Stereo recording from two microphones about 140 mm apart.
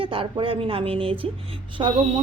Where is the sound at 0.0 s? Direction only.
40° right (ahead or behind).